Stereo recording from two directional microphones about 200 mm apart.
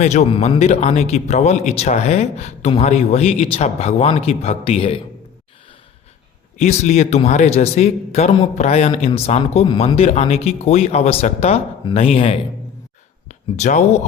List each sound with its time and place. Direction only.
0.0 s a man's voice: 35° left (ahead or behind)
6.6 s a man's voice: 35° left (ahead or behind)